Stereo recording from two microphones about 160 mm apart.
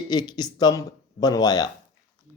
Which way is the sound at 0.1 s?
25° left (ahead or behind).